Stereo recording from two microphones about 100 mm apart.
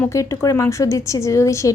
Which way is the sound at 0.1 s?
30° left (ahead or behind).